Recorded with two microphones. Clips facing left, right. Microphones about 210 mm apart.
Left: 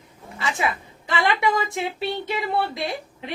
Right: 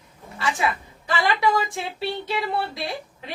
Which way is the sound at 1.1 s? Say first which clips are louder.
Even; 20° left (ahead or behind).